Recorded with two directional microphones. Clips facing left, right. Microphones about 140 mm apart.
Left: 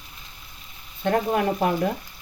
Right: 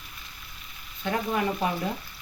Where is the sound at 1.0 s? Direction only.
50° left (ahead or behind).